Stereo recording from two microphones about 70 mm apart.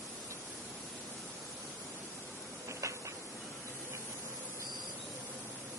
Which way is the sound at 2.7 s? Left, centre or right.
Right.